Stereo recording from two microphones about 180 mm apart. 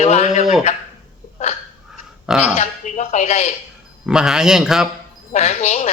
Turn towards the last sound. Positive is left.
turn(degrees=40)  # may be behind; listen again after turning